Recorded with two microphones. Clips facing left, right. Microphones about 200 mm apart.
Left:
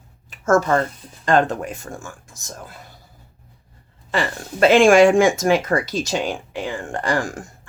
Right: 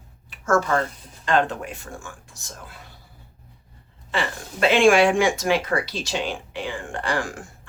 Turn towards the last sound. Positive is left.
turn(degrees=40)  # may be behind; listen again after turning